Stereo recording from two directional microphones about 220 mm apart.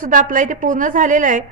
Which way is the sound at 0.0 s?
35° right (ahead or behind).